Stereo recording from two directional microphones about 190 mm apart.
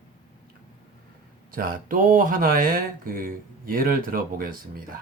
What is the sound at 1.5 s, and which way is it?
Speech, 50° right (ahead or behind).